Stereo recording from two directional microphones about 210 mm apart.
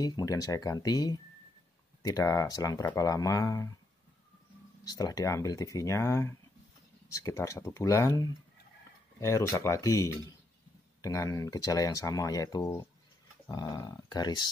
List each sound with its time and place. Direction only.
0.0 s speech: 15° left (ahead or behind)
4.8 s speech: 20° left (ahead or behind)